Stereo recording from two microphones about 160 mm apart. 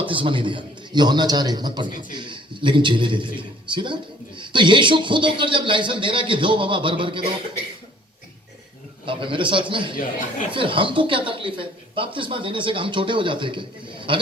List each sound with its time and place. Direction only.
0.0 s a man's voice: 30° right (ahead or behind)
9.0 s speech: 30° right (ahead or behind)